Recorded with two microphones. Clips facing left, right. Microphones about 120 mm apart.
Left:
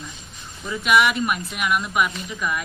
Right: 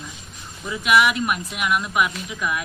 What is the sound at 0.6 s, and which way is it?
Speech, centre (ahead or behind).